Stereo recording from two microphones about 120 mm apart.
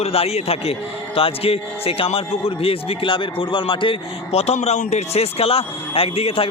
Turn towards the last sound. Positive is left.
turn(degrees=55)  # may be behind; listen again after turning